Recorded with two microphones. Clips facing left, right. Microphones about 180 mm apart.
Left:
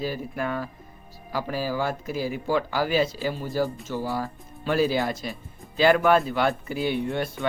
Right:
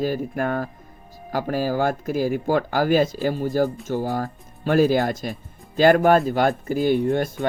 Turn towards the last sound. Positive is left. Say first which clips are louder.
# right 5 dB
turn(degrees=-45)  # may be behind; listen again after turning